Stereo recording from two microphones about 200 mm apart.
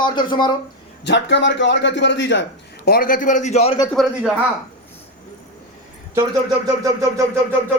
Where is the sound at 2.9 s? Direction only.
45° left (ahead or behind).